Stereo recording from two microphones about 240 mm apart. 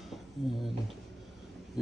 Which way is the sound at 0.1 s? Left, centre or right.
Centre.